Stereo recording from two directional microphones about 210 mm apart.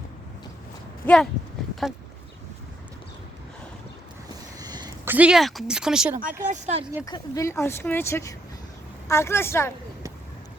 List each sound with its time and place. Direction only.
1.0 s speech: 5° left (ahead or behind)
4.6 s a sound: 20° right (ahead or behind)
5.0 s speech: 5° right (ahead or behind)
6.5 s speech: 30° right (ahead or behind)
7.0 s speech: 15° left (ahead or behind)